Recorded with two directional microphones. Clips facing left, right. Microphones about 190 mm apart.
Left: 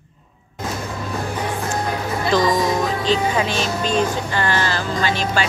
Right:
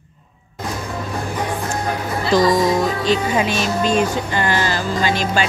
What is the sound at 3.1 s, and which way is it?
Speech, 15° right (ahead or behind).